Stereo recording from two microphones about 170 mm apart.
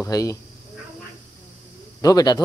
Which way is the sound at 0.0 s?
20° left (ahead or behind).